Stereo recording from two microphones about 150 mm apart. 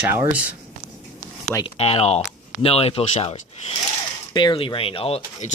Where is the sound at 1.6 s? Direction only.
40° left (ahead or behind).